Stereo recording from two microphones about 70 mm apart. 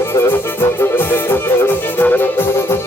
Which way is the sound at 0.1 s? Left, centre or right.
Left.